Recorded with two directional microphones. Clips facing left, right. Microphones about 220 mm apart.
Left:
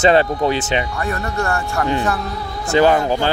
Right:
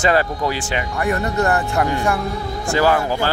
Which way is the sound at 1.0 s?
15° right (ahead or behind).